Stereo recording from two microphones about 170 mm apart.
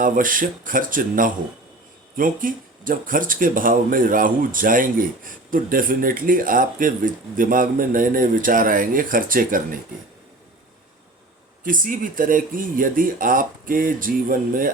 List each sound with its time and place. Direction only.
0.0 s speech: 55° right (ahead or behind)
11.6 s speech: 55° right (ahead or behind)